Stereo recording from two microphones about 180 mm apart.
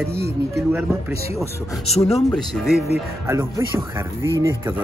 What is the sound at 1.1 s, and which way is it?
Speech, 35° left (ahead or behind).